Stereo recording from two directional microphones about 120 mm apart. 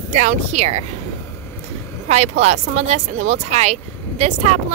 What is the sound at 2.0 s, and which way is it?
Speech, 65° right (ahead or behind).